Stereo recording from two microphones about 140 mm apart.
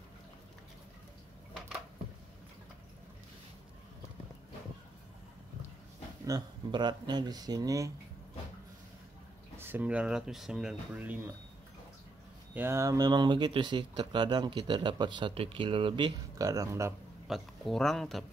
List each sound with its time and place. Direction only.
6.2 s speech: 30° right (ahead or behind)
9.6 s speech: 15° right (ahead or behind)
12.5 s speech: 20° right (ahead or behind); by 16.1 s 40° right (ahead or behind)
16.3 s speech: 25° right (ahead or behind)
17.3 s speech: centre (ahead or behind)